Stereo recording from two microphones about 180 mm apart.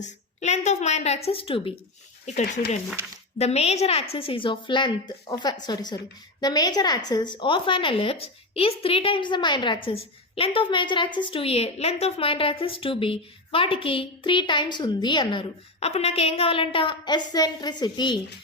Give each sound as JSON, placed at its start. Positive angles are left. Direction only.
{"t": 0.0, "sound": "a woman's voice", "side_deg": 40}